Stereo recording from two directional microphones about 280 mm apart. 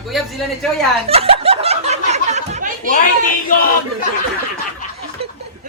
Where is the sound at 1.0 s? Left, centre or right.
Right.